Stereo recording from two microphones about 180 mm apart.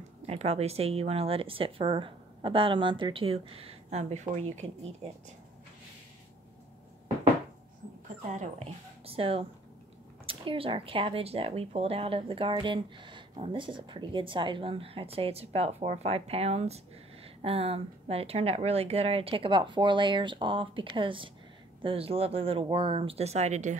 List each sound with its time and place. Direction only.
0.3 s speech: 35° right (ahead or behind)
8.3 s speech: 40° right (ahead or behind)